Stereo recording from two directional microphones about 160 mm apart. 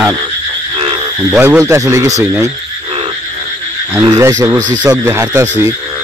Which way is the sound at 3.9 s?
20° right (ahead or behind).